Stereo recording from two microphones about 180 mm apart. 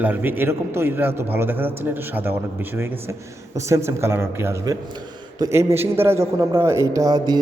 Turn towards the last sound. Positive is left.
turn(degrees=-20)  # may be behind; listen again after turning